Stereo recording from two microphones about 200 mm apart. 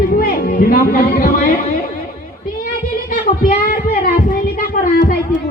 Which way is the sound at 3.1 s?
45° left (ahead or behind).